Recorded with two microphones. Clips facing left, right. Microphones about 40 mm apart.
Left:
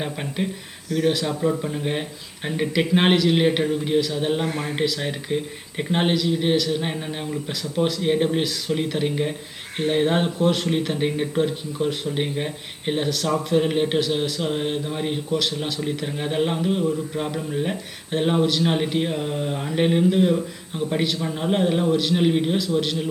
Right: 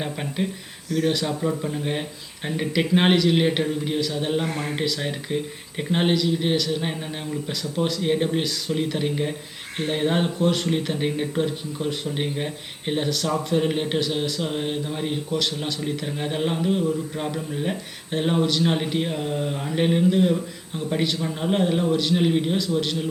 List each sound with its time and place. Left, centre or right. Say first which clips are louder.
0.0 s speech: even; centre